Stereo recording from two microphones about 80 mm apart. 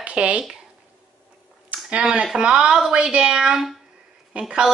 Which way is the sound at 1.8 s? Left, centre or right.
Centre.